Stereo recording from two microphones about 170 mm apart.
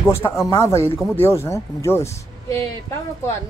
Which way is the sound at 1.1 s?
15° left (ahead or behind).